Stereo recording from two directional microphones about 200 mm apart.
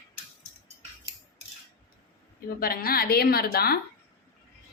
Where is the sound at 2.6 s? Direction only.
45° left (ahead or behind).